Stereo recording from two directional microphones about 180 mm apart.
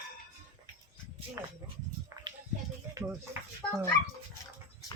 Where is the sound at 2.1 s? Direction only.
15° right (ahead or behind).